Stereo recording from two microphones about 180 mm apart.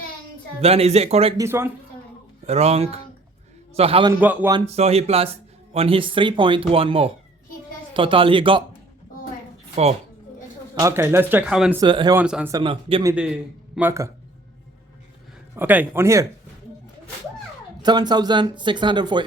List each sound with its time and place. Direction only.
0.6 s speech: 35° right (ahead or behind)
1.4 s speech: 15° right (ahead or behind)
2.5 s speech: 35° right (ahead or behind)
4.2 s speech: 10° right (ahead or behind)
4.5 s speech: 35° right (ahead or behind)
10.8 s speech: 15° right (ahead or behind)
11.8 s speech: 25° right (ahead or behind)
12.1 s speech: 5° right (ahead or behind)
12.5 s speech: 25° right (ahead or behind)
13.7 s speech: 15° right (ahead or behind)
15.5 s speech: 10° right (ahead or behind)
17.8 s speech: 25° right (ahead or behind)